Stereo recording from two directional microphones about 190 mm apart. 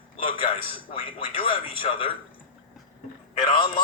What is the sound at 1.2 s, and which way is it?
Speech, 30° left (ahead or behind).